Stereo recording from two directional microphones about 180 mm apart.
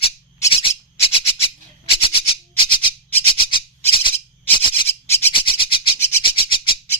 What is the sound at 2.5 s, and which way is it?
Music, 25° left (ahead or behind).